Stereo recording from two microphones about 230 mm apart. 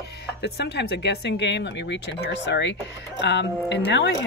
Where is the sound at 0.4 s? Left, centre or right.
Left.